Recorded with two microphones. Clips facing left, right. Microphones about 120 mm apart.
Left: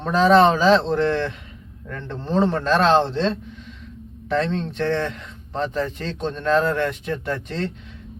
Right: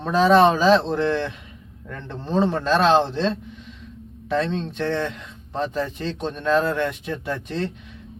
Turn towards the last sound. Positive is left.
turn(degrees=-15)  # may be behind; listen again after turning